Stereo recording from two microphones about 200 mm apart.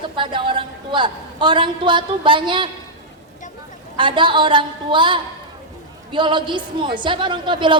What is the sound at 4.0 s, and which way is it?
A woman's voice, 25° right (ahead or behind).